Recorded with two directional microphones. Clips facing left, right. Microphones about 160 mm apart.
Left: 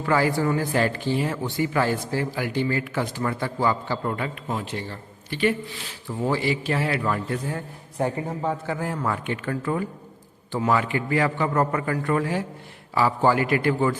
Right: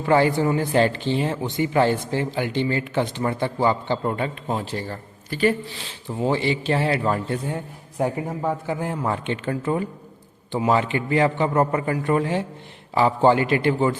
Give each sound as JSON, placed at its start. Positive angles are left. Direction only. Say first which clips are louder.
{"t": 0.0, "sound": "speech", "louder": "right 3 dB", "side_deg": -25}
{"t": 5.9, "sound": "speech", "louder": "right 2 dB", "side_deg": -20}